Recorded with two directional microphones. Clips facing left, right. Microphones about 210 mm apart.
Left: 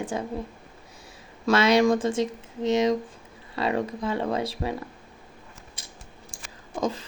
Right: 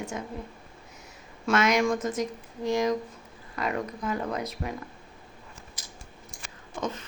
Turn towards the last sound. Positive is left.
turn(degrees=35)  # may be behind; listen again after turning